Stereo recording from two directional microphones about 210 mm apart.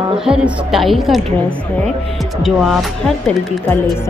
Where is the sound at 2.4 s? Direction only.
Centre (ahead or behind).